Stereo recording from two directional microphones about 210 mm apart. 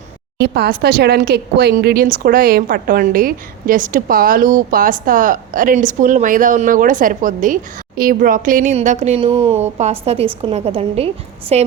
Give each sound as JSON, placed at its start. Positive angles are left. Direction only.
{"t": 0.3, "sound": "speech", "side_deg": -50}